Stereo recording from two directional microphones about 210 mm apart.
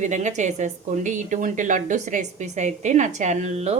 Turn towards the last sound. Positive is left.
turn(degrees=-30)  # may be behind; listen again after turning